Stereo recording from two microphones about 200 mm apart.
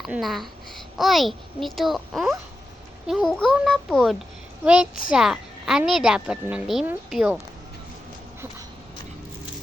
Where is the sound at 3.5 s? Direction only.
Centre (ahead or behind).